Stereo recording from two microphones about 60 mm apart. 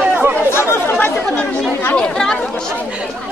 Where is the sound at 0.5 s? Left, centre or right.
Left.